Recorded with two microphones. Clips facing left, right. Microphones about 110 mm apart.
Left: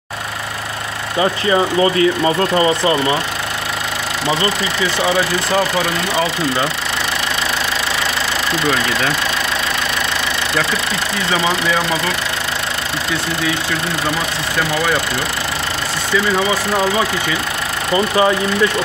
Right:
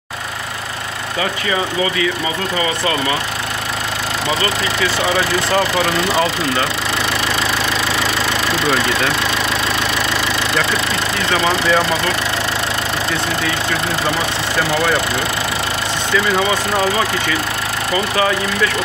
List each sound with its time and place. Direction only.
1.2 s speech: 35° left (ahead or behind)
17.9 s speech: 25° left (ahead or behind)